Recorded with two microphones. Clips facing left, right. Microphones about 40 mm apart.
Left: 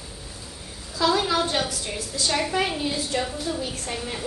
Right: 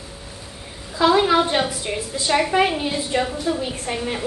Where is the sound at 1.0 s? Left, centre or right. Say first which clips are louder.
Right 6 dB; right.